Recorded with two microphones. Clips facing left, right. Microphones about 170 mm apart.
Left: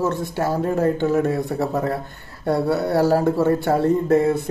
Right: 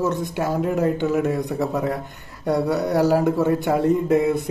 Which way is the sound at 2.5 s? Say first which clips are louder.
Left 1 dB; 15° right (ahead or behind).